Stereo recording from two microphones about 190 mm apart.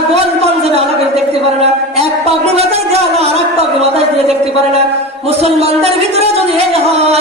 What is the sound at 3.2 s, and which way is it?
Speech, 35° right (ahead or behind).